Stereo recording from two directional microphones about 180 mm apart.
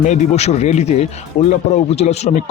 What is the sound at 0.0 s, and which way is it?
Speech, 40° left (ahead or behind).